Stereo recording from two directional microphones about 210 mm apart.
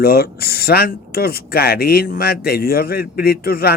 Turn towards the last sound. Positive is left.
turn(degrees=45)  # may be behind; listen again after turning